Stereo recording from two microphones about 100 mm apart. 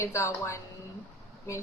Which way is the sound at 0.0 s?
30° left (ahead or behind).